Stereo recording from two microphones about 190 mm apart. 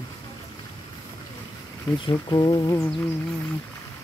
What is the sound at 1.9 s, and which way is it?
Speech, 25° left (ahead or behind).